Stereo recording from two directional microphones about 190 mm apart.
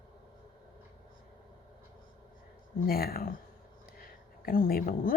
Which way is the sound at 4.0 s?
50° left (ahead or behind).